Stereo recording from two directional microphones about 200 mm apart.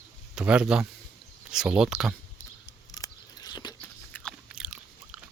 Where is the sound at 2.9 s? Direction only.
20° left (ahead or behind).